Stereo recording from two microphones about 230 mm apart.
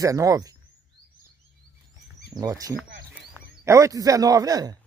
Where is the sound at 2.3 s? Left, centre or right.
Centre.